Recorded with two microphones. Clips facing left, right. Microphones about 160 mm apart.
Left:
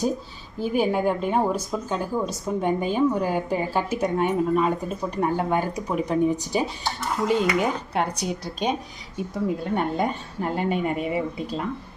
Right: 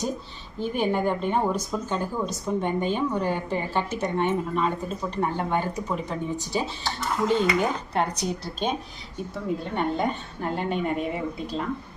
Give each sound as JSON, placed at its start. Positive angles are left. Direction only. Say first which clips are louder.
{"t": 0.6, "sound": "a woman's voice", "louder": "left 2 dB", "side_deg": 5}